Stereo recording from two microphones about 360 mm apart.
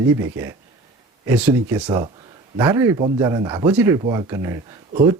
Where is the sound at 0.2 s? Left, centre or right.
Centre.